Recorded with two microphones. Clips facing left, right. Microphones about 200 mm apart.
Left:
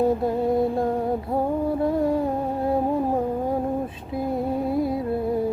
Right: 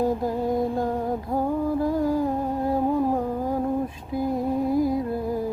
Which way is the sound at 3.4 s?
25° left (ahead or behind).